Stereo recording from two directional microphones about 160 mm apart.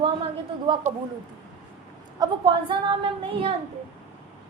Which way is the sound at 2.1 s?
25° right (ahead or behind).